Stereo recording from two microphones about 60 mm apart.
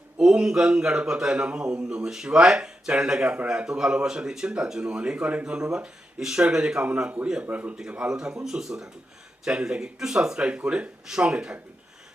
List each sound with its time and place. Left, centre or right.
0.2 s a man's voice: centre
6.8 s a man's voice: right
7.8 s a man's voice: centre